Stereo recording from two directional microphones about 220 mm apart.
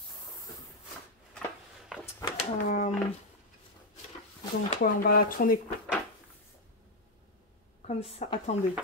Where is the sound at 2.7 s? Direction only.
35° left (ahead or behind).